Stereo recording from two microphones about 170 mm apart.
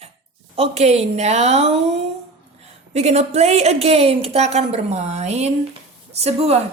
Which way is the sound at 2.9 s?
40° right (ahead or behind).